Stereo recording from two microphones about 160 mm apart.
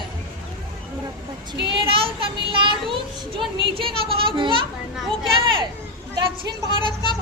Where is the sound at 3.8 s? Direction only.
35° right (ahead or behind).